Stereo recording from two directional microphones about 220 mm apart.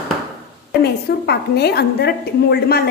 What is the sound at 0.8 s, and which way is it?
A woman's voice, 45° left (ahead or behind).